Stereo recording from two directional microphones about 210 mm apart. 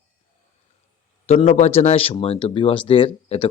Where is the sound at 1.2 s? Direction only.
30° left (ahead or behind).